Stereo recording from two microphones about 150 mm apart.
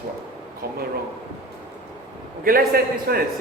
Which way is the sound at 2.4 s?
75° right (ahead or behind).